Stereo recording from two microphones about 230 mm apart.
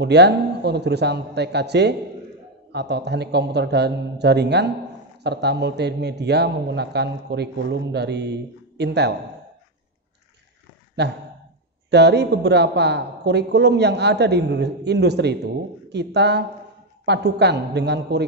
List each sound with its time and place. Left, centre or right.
0.0 s a woman's voice: right
11.0 s a woman's voice: right